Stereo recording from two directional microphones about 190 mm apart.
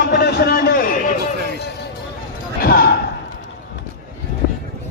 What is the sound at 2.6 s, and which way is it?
Basketball bounce, 55° left (ahead or behind).